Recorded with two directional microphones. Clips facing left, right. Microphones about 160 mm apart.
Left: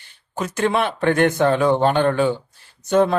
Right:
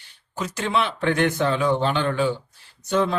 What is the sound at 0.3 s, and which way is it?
Speech, 55° left (ahead or behind).